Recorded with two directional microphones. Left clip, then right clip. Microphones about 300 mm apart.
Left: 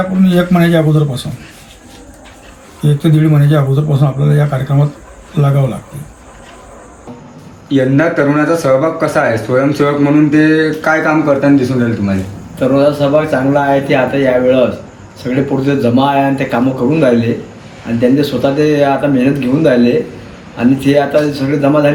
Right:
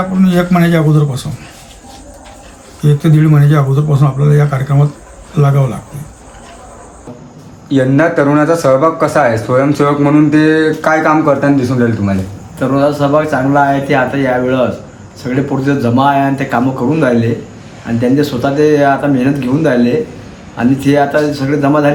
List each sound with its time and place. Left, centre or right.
0.3 s a man's voice: centre
2.8 s a man's voice: centre
7.7 s speech: centre
12.5 s speech: centre